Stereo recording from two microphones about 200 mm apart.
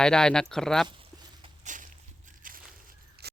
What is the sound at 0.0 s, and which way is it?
Speech, 5° left (ahead or behind).